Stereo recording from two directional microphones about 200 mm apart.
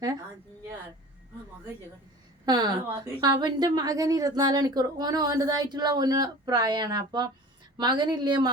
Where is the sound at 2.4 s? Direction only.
20° right (ahead or behind).